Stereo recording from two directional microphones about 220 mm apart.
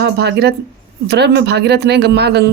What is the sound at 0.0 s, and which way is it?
A woman's voice, 50° right (ahead or behind).